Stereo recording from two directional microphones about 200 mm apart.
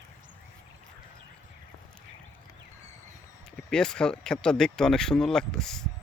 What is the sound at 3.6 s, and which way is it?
Speech, 5° left (ahead or behind).